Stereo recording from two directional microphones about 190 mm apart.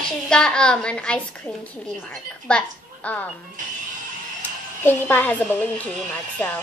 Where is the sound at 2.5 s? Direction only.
5° left (ahead or behind).